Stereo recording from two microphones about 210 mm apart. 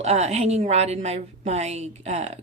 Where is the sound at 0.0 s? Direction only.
30° right (ahead or behind).